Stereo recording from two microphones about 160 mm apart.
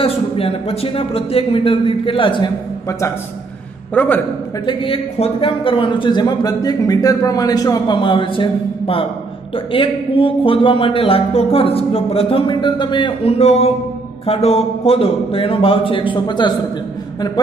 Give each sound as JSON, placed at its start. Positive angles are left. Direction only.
{"t": 0.0, "sound": "speech", "side_deg": 35}
{"t": 3.9, "sound": "a man's voice", "side_deg": 10}
{"t": 4.6, "sound": "a man's voice", "side_deg": 35}